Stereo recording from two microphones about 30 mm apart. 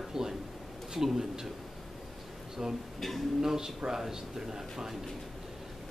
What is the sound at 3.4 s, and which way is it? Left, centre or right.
Speech, centre.